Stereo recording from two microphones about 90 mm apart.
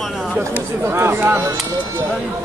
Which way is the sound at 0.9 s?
25° right (ahead or behind).